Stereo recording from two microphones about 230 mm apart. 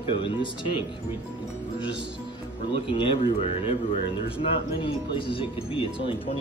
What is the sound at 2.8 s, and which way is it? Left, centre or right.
A man's voice, left.